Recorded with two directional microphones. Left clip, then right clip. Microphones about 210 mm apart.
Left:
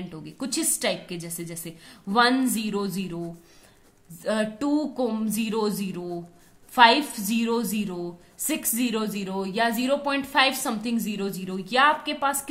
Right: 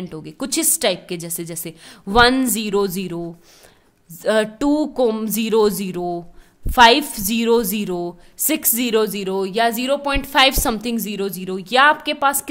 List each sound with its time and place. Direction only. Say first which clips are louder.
0.1 s a woman's voice: right 7 dB; 50° right (ahead or behind)
4.2 s a woman's voice: right 8 dB; 50° right (ahead or behind)